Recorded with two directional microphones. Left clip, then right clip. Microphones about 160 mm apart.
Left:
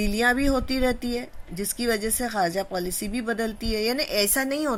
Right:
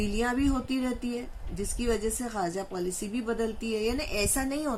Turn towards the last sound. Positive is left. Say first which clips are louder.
# left 6 dB
turn(degrees=50)  # may be behind; listen again after turning